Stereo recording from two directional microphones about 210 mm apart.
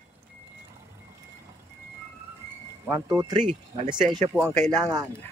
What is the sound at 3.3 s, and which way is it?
Speech, 35° right (ahead or behind).